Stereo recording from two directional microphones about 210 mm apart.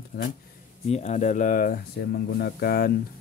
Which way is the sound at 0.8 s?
30° left (ahead or behind).